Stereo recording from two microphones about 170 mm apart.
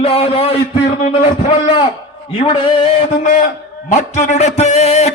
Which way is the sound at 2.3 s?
30° left (ahead or behind).